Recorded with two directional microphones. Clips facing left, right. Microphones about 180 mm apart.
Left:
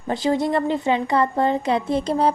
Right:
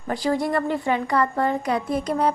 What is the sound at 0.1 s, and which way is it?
A woman's voice, 20° left (ahead or behind).